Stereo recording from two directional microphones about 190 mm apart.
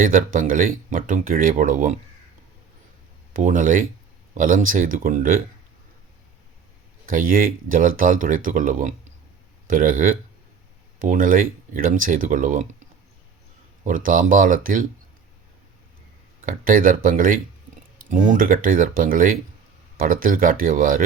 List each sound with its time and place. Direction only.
0.0 s speech: 45° right (ahead or behind)
3.3 s speech: 45° right (ahead or behind)
7.1 s speech: 45° right (ahead or behind)
16.4 s speech: 45° right (ahead or behind)